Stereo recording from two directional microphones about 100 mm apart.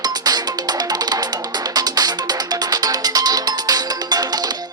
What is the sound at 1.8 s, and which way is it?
Music, 40° right (ahead or behind).